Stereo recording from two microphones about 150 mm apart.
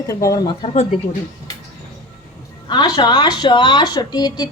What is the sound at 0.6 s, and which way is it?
Speech, 45° left (ahead or behind).